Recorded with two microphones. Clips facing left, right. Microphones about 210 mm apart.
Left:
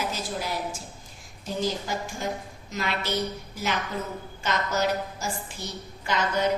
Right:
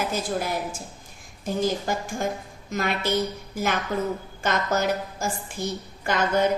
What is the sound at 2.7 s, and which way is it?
A woman's voice, 50° right (ahead or behind).